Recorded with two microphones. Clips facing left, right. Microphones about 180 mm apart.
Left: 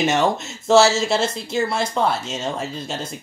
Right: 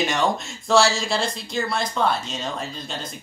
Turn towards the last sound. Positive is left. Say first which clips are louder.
# left 4 dB
turn(degrees=25)  # may be behind; listen again after turning